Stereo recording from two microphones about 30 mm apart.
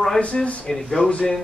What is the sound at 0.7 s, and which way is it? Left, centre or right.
Speech, left.